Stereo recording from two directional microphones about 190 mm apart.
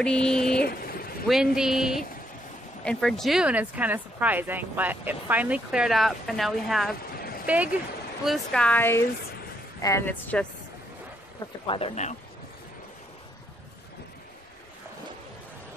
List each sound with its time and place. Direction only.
0.0 s speech: 5° left (ahead or behind)
0.6 s speech: 55° left (ahead or behind)
1.2 s speech: centre (ahead or behind)
7.2 s vehicle: 50° left (ahead or behind)
7.4 s speech: 10° right (ahead or behind)
8.3 s speech: 5° left (ahead or behind)
11.6 s speech: 30° left (ahead or behind)